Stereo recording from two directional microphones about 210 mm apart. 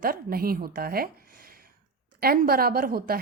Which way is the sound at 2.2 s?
45° right (ahead or behind).